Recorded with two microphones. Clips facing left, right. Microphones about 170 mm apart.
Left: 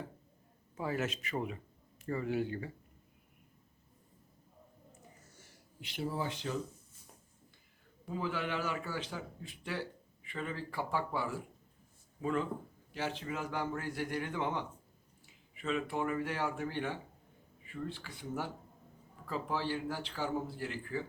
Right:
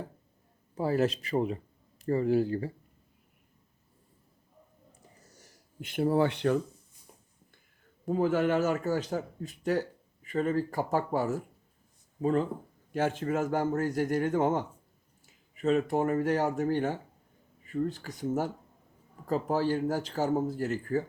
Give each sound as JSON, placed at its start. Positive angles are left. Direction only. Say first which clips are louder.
{"t": 0.8, "sound": "speech", "louder": "right 9 dB", "side_deg": -35}
{"t": 4.9, "sound": "a sound", "louder": "even", "side_deg": -40}
{"t": 8.0, "sound": "speech", "louder": "right 11 dB", "side_deg": -45}
{"t": 12.9, "sound": "speech", "louder": "right 10 dB", "side_deg": -50}